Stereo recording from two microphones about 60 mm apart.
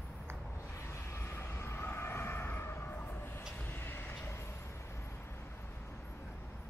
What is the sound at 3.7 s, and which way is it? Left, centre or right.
Vehicle, left.